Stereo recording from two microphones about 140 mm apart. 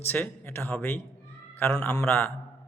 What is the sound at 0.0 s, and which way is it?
A man's voice, 15° left (ahead or behind).